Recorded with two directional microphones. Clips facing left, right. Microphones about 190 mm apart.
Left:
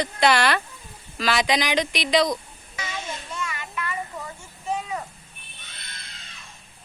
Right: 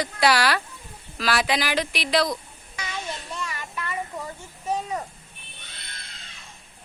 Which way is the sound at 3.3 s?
35° right (ahead or behind).